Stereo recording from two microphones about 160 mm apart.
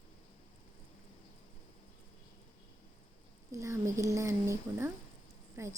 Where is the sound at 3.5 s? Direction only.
20° right (ahead or behind).